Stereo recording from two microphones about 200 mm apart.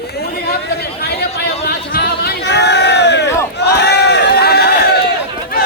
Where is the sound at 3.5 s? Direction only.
55° left (ahead or behind).